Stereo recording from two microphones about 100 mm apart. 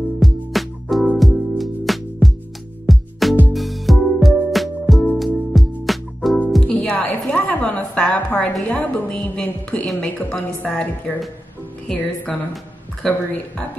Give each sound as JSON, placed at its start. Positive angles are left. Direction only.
{"t": 0.2, "sound": "music", "side_deg": 0}
{"t": 6.7, "sound": "a sound", "side_deg": 15}
{"t": 8.6, "sound": "a woman's voice", "side_deg": 15}